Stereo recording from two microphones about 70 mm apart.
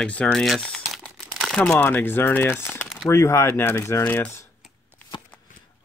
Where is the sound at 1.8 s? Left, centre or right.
Left.